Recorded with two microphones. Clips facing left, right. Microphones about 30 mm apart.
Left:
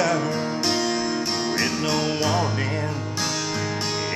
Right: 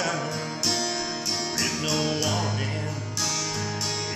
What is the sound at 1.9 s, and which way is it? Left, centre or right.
Music, centre.